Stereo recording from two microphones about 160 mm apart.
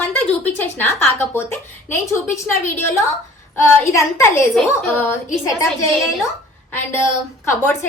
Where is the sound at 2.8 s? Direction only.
15° left (ahead or behind).